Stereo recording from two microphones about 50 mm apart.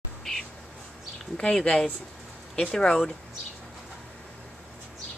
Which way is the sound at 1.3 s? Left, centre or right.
Centre.